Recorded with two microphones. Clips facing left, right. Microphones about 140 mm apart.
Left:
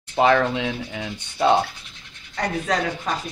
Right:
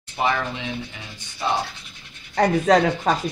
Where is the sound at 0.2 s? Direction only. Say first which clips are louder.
Left 6 dB; 85° left; by 1.6 s 65° left (ahead or behind).